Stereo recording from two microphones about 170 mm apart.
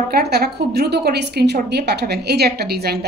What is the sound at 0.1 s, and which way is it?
A woman's voice, 70° right (ahead or behind).